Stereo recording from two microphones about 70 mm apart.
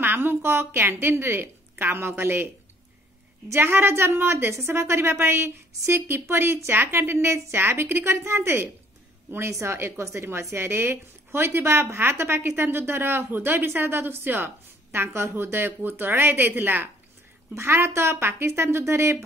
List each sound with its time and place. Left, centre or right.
0.0 s a woman's voice: right